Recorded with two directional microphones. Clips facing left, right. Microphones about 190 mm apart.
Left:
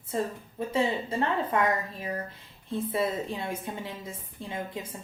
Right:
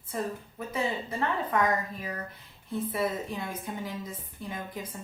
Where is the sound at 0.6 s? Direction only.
30° left (ahead or behind).